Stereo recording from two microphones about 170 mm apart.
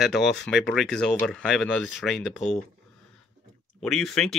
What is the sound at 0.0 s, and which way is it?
Speech, centre (ahead or behind).